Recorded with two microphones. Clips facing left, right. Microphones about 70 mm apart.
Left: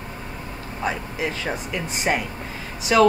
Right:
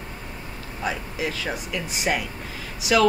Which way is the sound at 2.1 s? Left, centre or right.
Centre.